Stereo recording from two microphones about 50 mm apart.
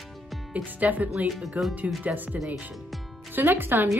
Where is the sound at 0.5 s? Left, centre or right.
Right.